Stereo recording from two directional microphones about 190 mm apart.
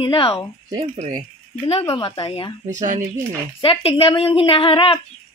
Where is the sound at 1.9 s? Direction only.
25° left (ahead or behind).